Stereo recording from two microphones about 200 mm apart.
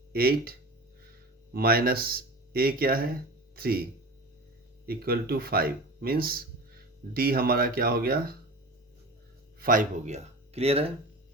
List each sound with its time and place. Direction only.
0.1 s speech: 50° right (ahead or behind)
1.5 s speech: 50° right (ahead or behind)
4.9 s speech: 50° right (ahead or behind)
9.6 s speech: 45° right (ahead or behind)